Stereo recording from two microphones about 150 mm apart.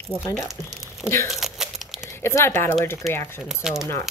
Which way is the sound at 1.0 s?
15° left (ahead or behind).